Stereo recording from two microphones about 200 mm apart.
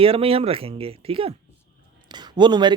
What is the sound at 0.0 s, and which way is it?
Speech, 30° right (ahead or behind).